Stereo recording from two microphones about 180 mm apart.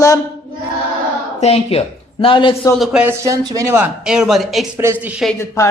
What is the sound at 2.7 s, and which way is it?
Speech, 5° right (ahead or behind).